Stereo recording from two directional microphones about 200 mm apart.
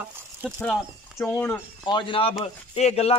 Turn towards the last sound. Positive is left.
turn(degrees=30)  # may be behind; listen again after turning